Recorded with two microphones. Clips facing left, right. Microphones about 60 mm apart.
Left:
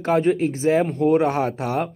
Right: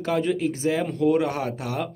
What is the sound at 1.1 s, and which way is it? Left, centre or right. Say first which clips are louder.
Speech: left 5 dB; left.